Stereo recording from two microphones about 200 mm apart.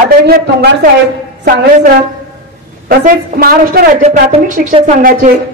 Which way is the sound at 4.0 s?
40° right (ahead or behind).